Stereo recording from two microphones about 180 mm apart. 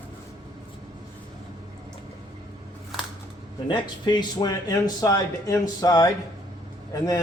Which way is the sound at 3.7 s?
25° left (ahead or behind).